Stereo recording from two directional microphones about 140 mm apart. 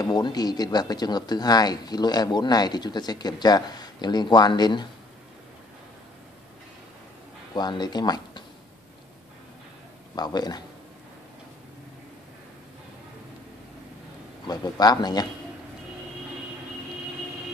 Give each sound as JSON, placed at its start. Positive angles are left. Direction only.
{"t": 0.0, "sound": "speech", "side_deg": 30}
{"t": 7.5, "sound": "speech", "side_deg": 30}
{"t": 10.1, "sound": "speech", "side_deg": 30}
{"t": 14.5, "sound": "speech", "side_deg": 30}